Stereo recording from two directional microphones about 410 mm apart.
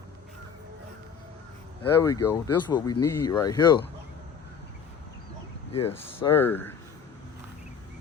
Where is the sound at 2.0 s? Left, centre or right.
Centre.